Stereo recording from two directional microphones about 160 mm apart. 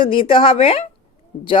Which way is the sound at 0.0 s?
35° left (ahead or behind).